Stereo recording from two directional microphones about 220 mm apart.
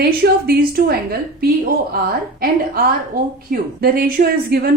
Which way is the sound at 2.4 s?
40° right (ahead or behind).